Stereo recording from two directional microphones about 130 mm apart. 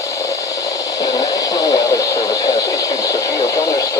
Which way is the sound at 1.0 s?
30° left (ahead or behind).